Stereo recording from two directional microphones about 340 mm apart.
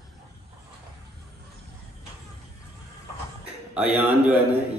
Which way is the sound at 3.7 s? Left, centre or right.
Centre.